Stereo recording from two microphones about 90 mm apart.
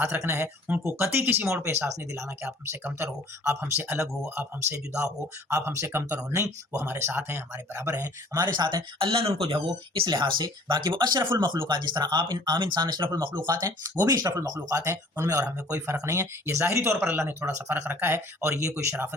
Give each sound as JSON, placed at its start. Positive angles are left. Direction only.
{"t": 0.0, "sound": "speech", "side_deg": -25}
{"t": 8.0, "sound": "speech", "side_deg": -40}
{"t": 8.5, "sound": "speech", "side_deg": -60}